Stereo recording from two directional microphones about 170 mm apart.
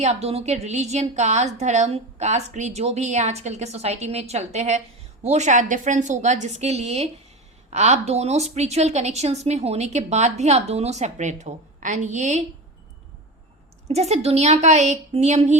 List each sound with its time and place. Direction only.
0.0 s a woman's voice: 40° right (ahead or behind)
13.8 s a woman's voice: 40° right (ahead or behind)